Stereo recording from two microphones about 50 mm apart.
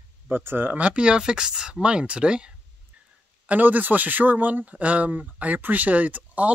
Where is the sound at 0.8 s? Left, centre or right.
Right.